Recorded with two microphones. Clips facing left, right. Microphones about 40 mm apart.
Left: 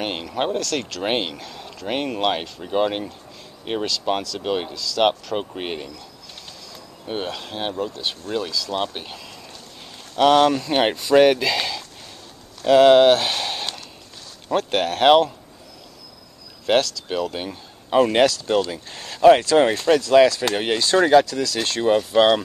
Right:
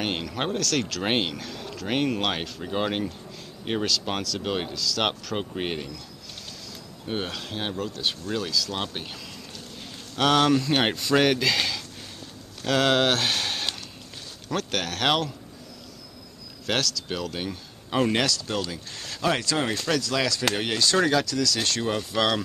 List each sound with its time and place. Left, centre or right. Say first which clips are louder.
0.0 s speech: left 4 dB; centre
7.1 s speech: left 3 dB; centre
14.5 s speech: left 7 dB; left
16.6 s speech: left 7 dB; centre
18.1 s speech: left 8 dB; left
19.3 s speech: left 9 dB; left